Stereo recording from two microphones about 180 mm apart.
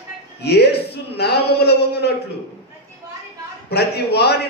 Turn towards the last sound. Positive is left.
turn(degrees=65)  # may be behind; listen again after turning